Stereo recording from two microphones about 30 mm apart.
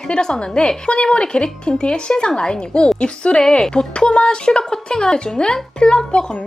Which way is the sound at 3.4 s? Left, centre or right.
Left.